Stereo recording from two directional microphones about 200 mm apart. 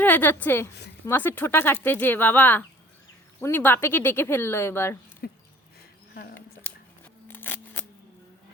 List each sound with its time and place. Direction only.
0.0 s speech: 10° left (ahead or behind)
5.2 s dog: 50° left (ahead or behind)
6.3 s scissors: 10° left (ahead or behind)